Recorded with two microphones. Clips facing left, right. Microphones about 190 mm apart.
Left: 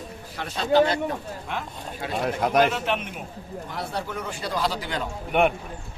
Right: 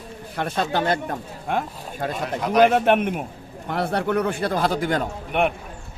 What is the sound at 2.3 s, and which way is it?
Speech, 50° left (ahead or behind).